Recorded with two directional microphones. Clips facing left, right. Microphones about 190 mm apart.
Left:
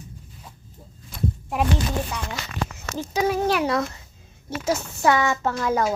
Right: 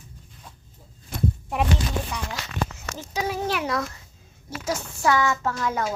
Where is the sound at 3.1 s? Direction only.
50° left (ahead or behind).